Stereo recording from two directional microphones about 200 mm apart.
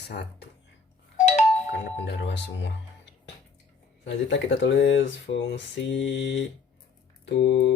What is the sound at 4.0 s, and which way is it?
Speech, 65° left (ahead or behind).